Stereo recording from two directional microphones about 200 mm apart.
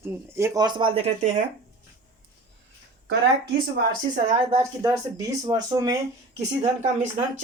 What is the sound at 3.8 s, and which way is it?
Speech, 55° right (ahead or behind).